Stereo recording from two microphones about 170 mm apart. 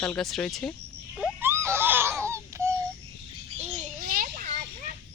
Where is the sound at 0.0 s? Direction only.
Centre (ahead or behind).